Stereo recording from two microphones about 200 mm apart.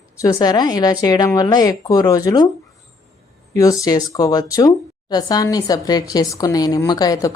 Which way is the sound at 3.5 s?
15° left (ahead or behind).